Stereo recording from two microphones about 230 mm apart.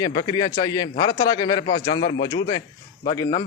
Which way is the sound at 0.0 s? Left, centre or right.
Centre.